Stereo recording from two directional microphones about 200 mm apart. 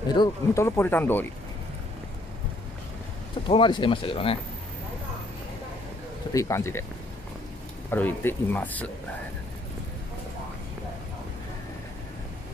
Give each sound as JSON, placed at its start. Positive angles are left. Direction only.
{"t": 0.1, "sound": "speech", "side_deg": 15}
{"t": 3.4, "sound": "speech", "side_deg": 25}
{"t": 6.3, "sound": "speech", "side_deg": 15}
{"t": 7.9, "sound": "speech", "side_deg": 10}